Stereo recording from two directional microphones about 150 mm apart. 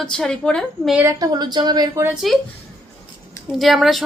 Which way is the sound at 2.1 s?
Centre (ahead or behind).